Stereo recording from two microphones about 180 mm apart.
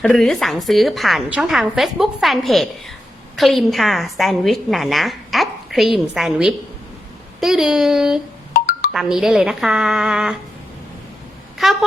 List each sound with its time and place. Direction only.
0.1 s a woman's voice: centre (ahead or behind)
8.5 s music: 55° left (ahead or behind)
8.9 s a woman's voice: centre (ahead or behind)
11.5 s speech: centre (ahead or behind)